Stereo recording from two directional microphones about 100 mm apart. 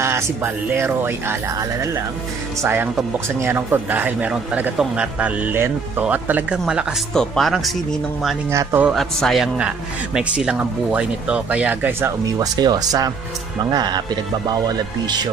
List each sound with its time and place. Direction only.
0.0 s a man's voice: 25° right (ahead or behind); by 7.7 s centre (ahead or behind)
8.5 s speech: 25° right (ahead or behind)
8.9 s a man's voice: centre (ahead or behind)
9.6 s speech: 10° right (ahead or behind)
12.4 s speech: 45° right (ahead or behind)